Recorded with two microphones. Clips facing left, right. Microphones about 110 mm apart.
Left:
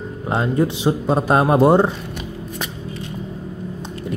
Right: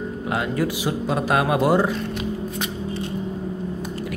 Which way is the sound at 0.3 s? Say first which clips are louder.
Left 5 dB; 25° left (ahead or behind).